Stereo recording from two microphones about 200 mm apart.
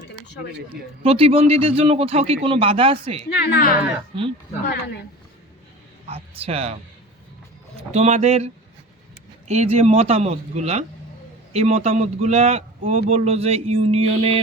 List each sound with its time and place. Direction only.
1.0 s speech: 30° right (ahead or behind)
3.4 s speech: 55° left (ahead or behind)
4.1 s speech: 25° right (ahead or behind)
4.7 s speech: 55° left (ahead or behind)
6.1 s speech: 30° right (ahead or behind)
7.8 s speech: 35° right (ahead or behind)
9.5 s speech: 35° right (ahead or behind)